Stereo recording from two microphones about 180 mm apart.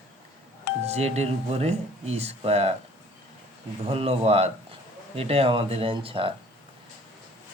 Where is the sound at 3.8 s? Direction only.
35° right (ahead or behind).